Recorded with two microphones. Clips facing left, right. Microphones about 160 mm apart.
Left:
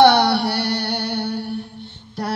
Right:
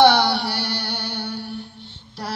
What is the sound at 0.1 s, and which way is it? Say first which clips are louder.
Music: left 3 dB; 65° left (ahead or behind).